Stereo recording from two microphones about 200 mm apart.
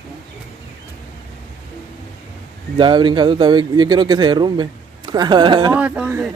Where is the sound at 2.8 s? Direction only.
25° right (ahead or behind).